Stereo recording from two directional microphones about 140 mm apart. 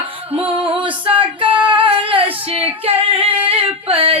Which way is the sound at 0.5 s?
40° right (ahead or behind).